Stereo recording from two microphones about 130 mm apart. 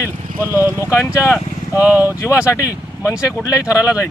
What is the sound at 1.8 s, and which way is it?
Speech, 15° right (ahead or behind).